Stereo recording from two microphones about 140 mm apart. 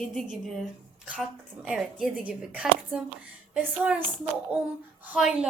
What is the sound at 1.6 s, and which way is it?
A woman's voice, 5° right (ahead or behind).